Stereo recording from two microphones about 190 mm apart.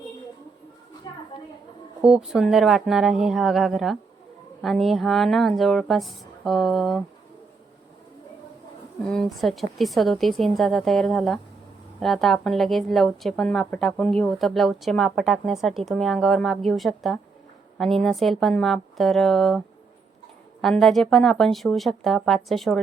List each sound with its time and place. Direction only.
1.1 s a sound: 20° left (ahead or behind)
2.0 s a woman's voice: 5° right (ahead or behind)
9.0 s a woman's voice: 5° left (ahead or behind)